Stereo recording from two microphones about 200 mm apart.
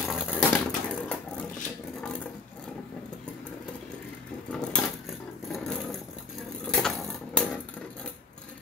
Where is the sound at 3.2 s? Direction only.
5° left (ahead or behind).